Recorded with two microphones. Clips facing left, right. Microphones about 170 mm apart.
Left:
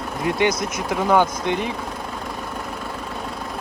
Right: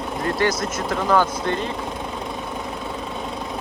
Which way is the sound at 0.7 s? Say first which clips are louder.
Left 1 dB; 10° left (ahead or behind).